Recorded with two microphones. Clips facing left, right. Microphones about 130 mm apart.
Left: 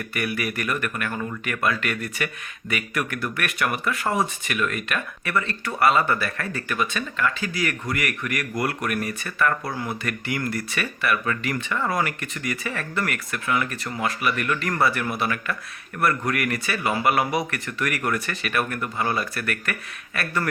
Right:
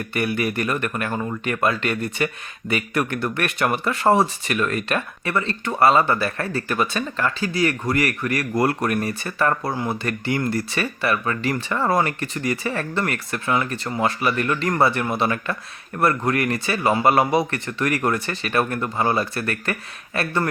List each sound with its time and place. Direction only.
0.1 s speech: 25° right (ahead or behind)